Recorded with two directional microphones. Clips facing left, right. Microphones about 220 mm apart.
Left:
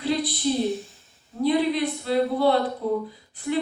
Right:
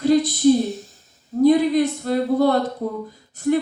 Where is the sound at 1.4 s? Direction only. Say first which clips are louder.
Right 7 dB; 45° right (ahead or behind).